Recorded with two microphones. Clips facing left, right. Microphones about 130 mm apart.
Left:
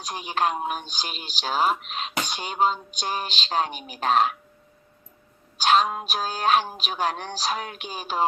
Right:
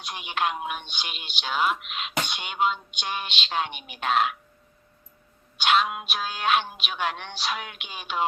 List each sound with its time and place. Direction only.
0.0 s speech: 40° left (ahead or behind)
5.5 s speech: 40° left (ahead or behind)